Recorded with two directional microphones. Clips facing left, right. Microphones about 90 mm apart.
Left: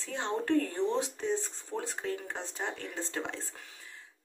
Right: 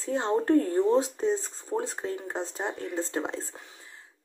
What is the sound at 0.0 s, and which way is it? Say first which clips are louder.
Speech: right 7 dB; 30° right (ahead or behind).